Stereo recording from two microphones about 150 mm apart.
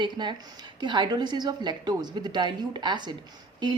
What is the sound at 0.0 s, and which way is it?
A woman's voice, 30° right (ahead or behind).